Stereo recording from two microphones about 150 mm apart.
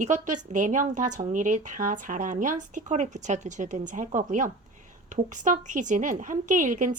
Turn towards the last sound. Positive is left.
turn(degrees=-60)  # may be behind; listen again after turning